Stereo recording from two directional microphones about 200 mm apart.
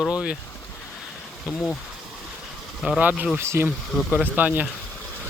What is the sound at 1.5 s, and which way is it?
Speech, 5° left (ahead or behind).